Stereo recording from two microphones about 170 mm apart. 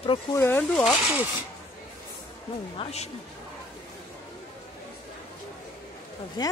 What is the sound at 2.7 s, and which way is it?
Speech, 40° left (ahead or behind).